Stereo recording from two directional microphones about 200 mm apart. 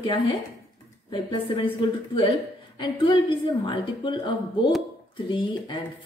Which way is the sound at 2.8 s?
25° left (ahead or behind).